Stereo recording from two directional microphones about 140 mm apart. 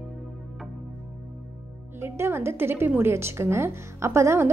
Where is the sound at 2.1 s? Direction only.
15° right (ahead or behind).